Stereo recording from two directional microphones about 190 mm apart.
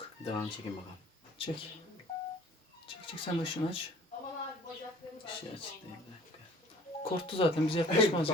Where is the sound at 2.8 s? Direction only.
30° left (ahead or behind).